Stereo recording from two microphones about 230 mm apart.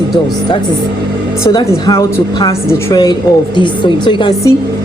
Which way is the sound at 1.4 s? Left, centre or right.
Centre.